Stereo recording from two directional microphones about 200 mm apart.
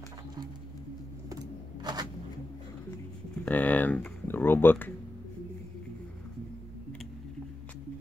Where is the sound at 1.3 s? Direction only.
20° right (ahead or behind).